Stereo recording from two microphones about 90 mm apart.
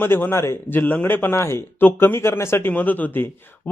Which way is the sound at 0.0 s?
25° left (ahead or behind).